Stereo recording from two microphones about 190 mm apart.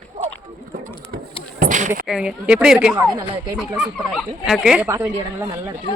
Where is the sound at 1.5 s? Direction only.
40° right (ahead or behind).